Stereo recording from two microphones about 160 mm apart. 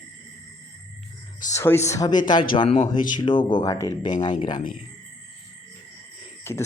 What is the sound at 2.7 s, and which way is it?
Speech, 50° left (ahead or behind).